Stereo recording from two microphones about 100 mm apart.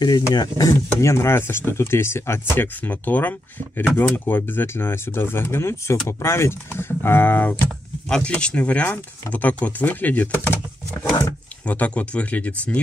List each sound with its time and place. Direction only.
0.0 s speech: 45° left (ahead or behind)
0.7 s speech: 25° left (ahead or behind)